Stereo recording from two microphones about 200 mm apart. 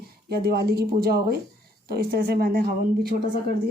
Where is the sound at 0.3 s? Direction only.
50° right (ahead or behind).